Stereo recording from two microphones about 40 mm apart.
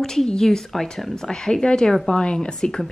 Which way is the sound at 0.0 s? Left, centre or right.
Centre.